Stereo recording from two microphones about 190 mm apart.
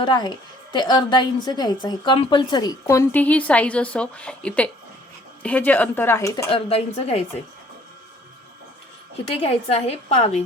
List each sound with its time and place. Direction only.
0.0 s a woman's voice: 25° left (ahead or behind)
6.5 s a woman's voice: 30° left (ahead or behind)
9.2 s a woman's voice: 30° left (ahead or behind)